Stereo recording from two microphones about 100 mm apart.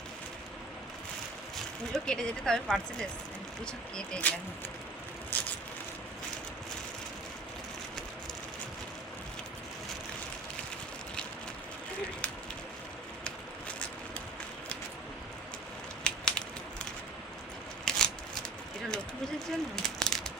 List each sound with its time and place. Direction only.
1.5 s speech: 5° left (ahead or behind)
3.9 s speech: 10° left (ahead or behind)
5.3 s vehicle: 15° left (ahead or behind)
16.0 s a sound: 10° left (ahead or behind)
17.8 s scissors: 5° left (ahead or behind)
19.5 s a sound: 5° left (ahead or behind)